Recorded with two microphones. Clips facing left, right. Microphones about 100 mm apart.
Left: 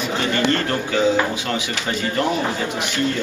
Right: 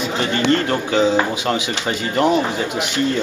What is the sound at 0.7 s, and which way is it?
Speech, 25° right (ahead or behind).